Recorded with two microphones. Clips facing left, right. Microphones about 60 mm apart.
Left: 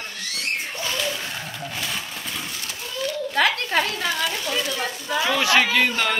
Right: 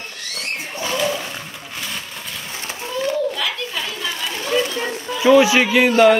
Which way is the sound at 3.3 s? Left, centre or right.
Left.